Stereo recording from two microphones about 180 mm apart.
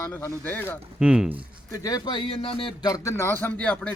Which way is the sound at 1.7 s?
20° left (ahead or behind).